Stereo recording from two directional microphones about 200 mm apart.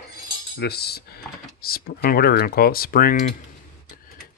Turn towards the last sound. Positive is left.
turn(degrees=45)  # may be behind; listen again after turning